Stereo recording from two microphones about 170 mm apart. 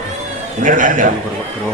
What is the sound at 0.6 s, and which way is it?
Speech, 50° right (ahead or behind).